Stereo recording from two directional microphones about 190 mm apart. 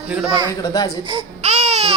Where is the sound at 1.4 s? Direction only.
35° right (ahead or behind).